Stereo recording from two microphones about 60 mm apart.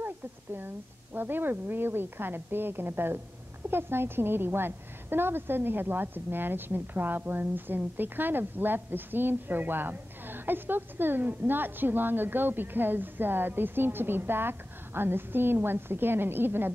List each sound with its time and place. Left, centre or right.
0.6 s a woman's voice: right